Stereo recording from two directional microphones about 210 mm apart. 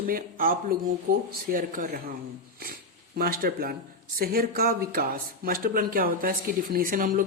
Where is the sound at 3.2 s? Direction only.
45° right (ahead or behind).